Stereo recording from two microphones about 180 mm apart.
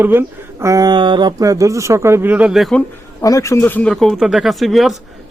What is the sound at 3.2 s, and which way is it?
Speech, 20° left (ahead or behind).